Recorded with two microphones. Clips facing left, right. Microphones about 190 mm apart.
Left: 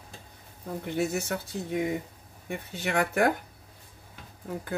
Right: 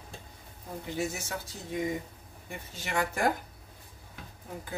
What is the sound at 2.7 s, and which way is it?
Speech, 60° left (ahead or behind).